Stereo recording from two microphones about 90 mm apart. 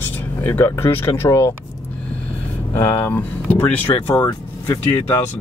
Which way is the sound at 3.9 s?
45° left (ahead or behind).